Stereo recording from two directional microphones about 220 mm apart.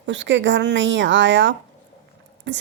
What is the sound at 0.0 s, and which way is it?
A woman's voice, 55° right (ahead or behind).